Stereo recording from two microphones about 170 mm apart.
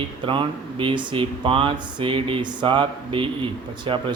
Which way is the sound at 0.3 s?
30° right (ahead or behind).